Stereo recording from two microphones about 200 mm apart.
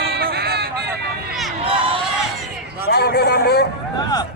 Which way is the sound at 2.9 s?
55° left (ahead or behind).